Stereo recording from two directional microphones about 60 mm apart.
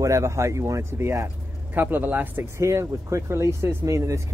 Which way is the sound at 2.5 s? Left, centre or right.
Right.